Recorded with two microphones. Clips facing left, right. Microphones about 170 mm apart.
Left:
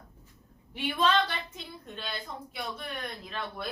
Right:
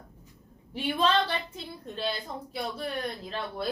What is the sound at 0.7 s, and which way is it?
A woman's voice, 35° right (ahead or behind).